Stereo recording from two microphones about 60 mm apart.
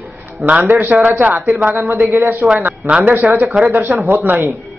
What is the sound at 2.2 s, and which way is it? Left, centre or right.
Speech, right.